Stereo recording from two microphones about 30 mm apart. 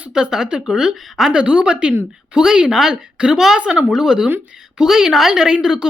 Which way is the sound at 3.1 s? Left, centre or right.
Right.